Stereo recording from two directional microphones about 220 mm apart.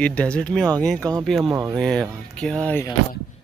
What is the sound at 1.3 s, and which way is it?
Speech, centre (ahead or behind).